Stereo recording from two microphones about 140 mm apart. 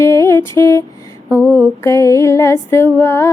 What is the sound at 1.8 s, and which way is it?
Music, 20° left (ahead or behind).